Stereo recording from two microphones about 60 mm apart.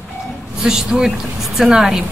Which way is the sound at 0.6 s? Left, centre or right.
Centre.